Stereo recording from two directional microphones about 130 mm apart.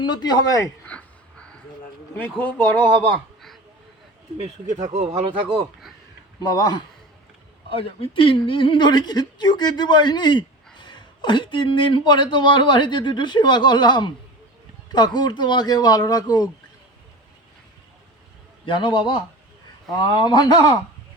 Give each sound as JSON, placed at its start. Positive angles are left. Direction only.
{"t": 0.0, "sound": "a man's voice", "side_deg": 35}
{"t": 0.9, "sound": "a sound", "side_deg": 10}
{"t": 2.4, "sound": "speech", "side_deg": 15}
{"t": 4.7, "sound": "speech", "side_deg": -65}
{"t": 6.4, "sound": "a man's voice", "side_deg": 30}
{"t": 7.7, "sound": "a man's voice", "side_deg": 45}
{"t": 18.6, "sound": "a man's voice", "side_deg": 40}